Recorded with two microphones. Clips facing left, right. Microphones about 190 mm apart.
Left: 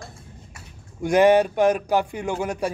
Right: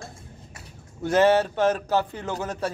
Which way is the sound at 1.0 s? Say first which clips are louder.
Left 3 dB; 15° left (ahead or behind).